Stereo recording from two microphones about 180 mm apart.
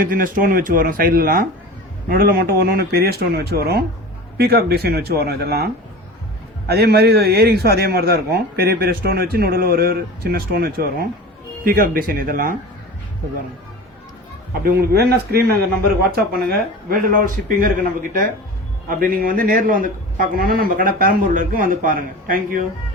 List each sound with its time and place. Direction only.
0.0 s a man's voice: 50° right (ahead or behind)
14.6 s a man's voice: 60° right (ahead or behind)